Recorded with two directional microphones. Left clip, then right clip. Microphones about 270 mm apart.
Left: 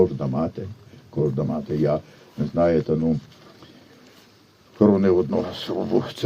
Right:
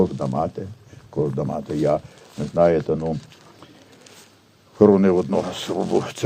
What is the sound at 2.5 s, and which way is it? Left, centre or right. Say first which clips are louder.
Speech: right 3 dB; right.